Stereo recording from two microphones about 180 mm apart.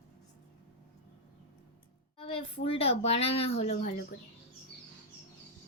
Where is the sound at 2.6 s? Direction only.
35° left (ahead or behind).